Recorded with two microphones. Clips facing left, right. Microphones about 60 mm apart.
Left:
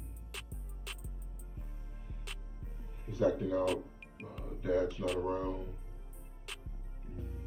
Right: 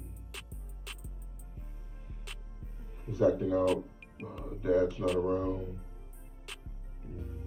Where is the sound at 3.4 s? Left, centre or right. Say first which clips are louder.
Right 4 dB; centre.